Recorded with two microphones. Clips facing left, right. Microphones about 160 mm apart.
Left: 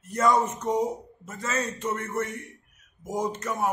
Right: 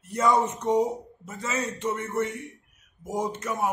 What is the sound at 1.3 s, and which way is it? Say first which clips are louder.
A man's voice: even; 20° right (ahead or behind).